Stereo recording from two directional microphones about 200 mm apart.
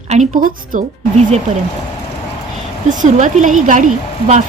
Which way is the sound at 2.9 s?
40° right (ahead or behind).